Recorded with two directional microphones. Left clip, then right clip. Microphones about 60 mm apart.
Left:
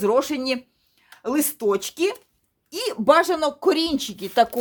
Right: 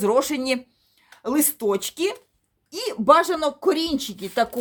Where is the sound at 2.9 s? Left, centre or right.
Left.